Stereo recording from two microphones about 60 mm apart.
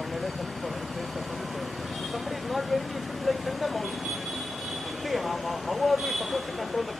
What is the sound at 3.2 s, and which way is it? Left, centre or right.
Speech, centre.